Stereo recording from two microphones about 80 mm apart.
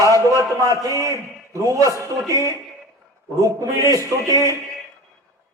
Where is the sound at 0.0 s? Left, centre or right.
Right.